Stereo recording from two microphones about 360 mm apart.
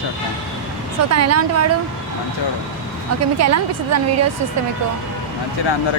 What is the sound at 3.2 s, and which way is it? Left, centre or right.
A woman's voice, right.